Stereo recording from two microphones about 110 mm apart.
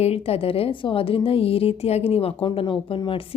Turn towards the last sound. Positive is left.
turn(degrees=50)  # may be behind; listen again after turning